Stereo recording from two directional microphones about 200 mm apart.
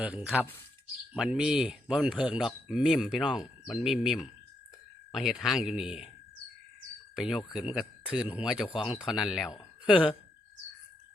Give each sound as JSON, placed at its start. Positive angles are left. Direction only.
{"t": 0.0, "sound": "speech", "side_deg": -5}
{"t": 7.2, "sound": "speech", "side_deg": 0}
{"t": 8.6, "sound": "speech", "side_deg": 25}
{"t": 8.9, "sound": "speech", "side_deg": 0}